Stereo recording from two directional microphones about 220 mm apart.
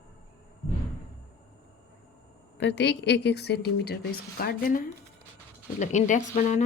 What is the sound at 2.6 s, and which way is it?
A woman's voice, 55° left (ahead or behind).